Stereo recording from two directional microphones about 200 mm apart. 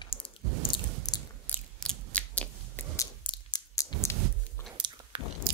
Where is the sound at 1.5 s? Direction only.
5° left (ahead or behind).